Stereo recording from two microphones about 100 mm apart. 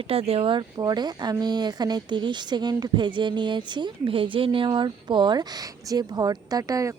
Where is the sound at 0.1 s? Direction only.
80° right.